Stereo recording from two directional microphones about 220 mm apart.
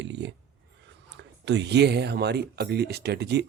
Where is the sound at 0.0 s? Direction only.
55° right (ahead or behind).